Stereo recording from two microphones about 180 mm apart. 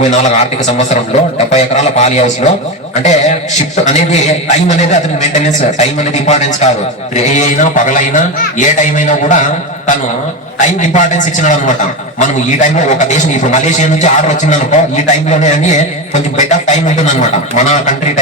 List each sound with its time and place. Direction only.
0.0 s a man's voice: 40° left (ahead or behind)
3.8 s a man's voice: 40° left (ahead or behind)
10.6 s a man's voice: 45° left (ahead or behind)